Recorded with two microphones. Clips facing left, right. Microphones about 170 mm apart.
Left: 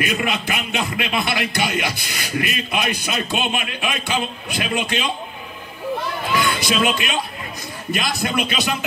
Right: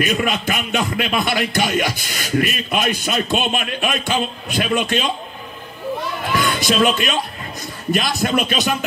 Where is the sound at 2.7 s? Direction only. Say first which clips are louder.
Right 3 dB; centre (ahead or behind).